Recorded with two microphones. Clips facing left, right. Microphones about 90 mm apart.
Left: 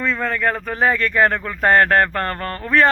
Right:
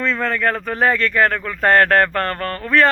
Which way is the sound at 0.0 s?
5° left (ahead or behind).